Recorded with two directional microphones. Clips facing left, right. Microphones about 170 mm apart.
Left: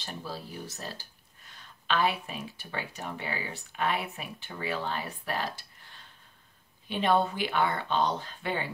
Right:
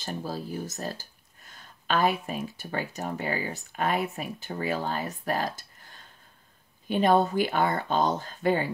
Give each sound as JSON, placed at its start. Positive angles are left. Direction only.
{"t": 0.0, "sound": "speech", "side_deg": -45}